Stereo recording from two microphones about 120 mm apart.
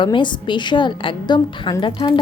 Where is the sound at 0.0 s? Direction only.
40° left (ahead or behind).